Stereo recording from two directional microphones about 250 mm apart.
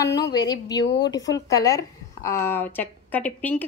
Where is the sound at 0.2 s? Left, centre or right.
Centre.